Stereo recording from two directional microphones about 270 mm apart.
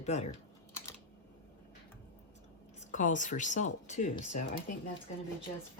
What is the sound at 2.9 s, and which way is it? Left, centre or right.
Speech, left.